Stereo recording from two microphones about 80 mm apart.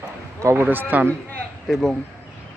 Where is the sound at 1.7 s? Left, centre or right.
Centre.